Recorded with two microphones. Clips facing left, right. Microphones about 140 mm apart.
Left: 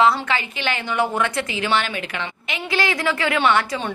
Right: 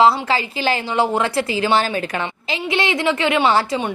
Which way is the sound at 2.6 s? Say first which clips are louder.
Right 3 dB; 25° right (ahead or behind).